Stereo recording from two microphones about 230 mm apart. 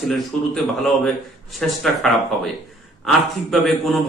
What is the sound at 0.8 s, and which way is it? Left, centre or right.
A man's voice, centre.